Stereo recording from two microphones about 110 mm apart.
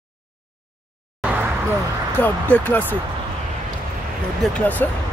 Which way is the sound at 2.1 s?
15° left (ahead or behind).